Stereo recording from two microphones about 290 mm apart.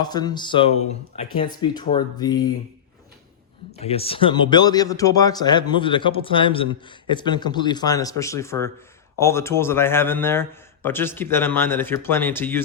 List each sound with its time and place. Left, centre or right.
0.0 s speech: centre
3.8 s speech: centre